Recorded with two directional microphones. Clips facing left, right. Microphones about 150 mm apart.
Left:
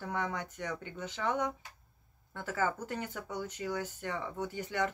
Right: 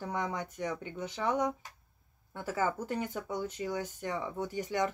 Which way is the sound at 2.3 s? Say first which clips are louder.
Right 1 dB; 15° right (ahead or behind).